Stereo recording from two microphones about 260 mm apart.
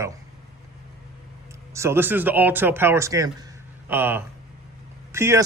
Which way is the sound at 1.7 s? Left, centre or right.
Centre.